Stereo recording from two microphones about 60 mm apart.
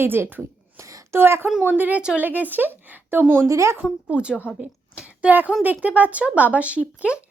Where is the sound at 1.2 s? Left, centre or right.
Right.